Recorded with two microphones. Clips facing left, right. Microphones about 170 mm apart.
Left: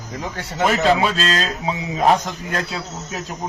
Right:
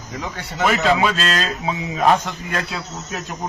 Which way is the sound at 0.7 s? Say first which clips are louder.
Even; 35° left (ahead or behind).